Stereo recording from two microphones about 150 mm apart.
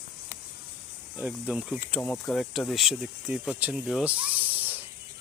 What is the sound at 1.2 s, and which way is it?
Speech, 10° right (ahead or behind).